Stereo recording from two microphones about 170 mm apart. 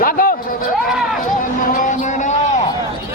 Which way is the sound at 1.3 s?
50° left (ahead or behind).